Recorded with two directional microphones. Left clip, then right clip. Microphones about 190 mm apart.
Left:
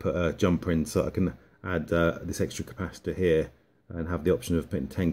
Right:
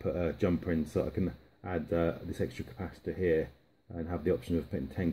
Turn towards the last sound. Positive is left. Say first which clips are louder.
# left 5 dB
turn(degrees=35)  # may be behind; listen again after turning